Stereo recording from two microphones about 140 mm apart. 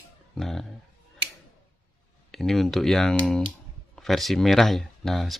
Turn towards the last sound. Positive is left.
turn(degrees=0)  # may be behind; listen again after turning